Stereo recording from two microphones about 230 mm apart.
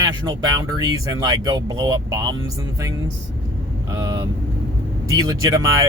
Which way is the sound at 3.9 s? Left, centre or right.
Centre.